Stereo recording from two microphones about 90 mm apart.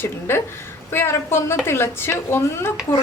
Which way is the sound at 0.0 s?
25° left (ahead or behind).